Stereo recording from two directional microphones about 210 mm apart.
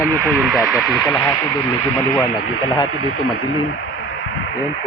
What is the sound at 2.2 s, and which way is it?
Speech, 20° left (ahead or behind).